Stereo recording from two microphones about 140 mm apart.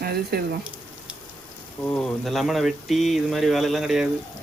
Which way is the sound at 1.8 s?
5° left (ahead or behind).